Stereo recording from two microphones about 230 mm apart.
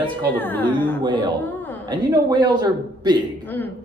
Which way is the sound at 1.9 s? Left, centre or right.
Centre.